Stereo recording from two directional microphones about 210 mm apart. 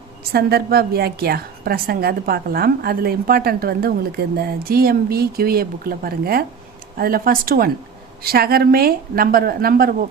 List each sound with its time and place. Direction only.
0.3 s a woman's voice: 50° right (ahead or behind)